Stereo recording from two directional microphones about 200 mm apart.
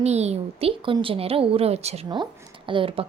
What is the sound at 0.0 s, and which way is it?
A woman's voice, 35° right (ahead or behind).